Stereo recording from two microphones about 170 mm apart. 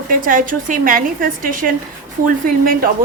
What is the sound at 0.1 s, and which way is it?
A woman's voice, 55° right (ahead or behind).